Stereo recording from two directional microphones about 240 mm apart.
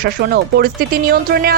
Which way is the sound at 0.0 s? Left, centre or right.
Right.